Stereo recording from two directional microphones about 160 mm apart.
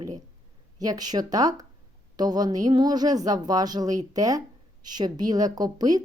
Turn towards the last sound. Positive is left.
turn(degrees=-25)  # may be behind; listen again after turning